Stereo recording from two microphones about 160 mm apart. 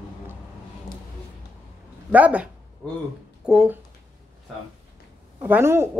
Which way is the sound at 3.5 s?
5° right (ahead or behind).